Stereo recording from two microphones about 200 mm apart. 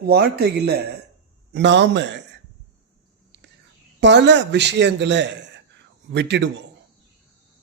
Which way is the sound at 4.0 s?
60° right (ahead or behind).